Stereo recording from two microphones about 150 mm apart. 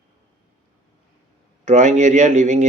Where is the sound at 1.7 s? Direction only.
50° right (ahead or behind).